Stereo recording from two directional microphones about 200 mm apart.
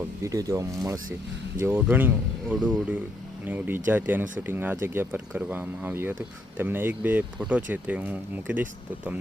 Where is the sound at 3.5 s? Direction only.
10° right (ahead or behind).